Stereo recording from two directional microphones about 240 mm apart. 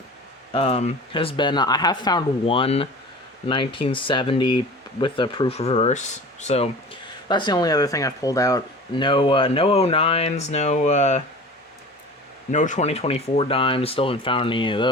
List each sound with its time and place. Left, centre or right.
0.5 s speech: left
12.5 s speech: left